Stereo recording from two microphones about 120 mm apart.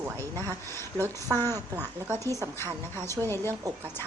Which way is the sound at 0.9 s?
25° right (ahead or behind).